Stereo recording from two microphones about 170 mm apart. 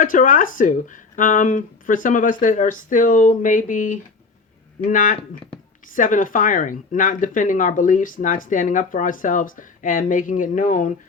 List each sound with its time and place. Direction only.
0.0 s speech: 50° left (ahead or behind)